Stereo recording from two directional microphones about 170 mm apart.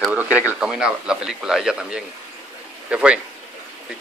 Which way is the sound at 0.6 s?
5° right (ahead or behind).